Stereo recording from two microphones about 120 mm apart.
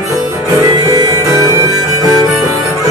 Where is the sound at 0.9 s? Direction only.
35° right (ahead or behind).